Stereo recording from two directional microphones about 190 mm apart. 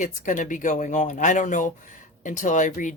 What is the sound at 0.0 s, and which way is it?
Speech, 40° left (ahead or behind).